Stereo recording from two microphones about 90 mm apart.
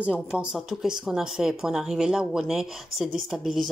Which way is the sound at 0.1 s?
10° right (ahead or behind).